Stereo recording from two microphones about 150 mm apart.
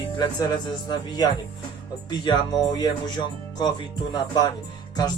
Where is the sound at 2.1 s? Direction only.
30° left (ahead or behind).